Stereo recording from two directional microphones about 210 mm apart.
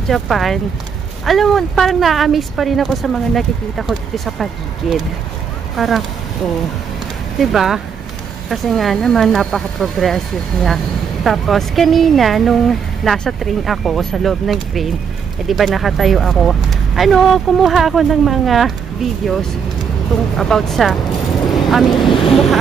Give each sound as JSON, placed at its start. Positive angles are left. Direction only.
{"t": 0.1, "sound": "speech", "side_deg": 0}
{"t": 7.3, "sound": "speech", "side_deg": 0}
{"t": 20.3, "sound": "speech", "side_deg": 0}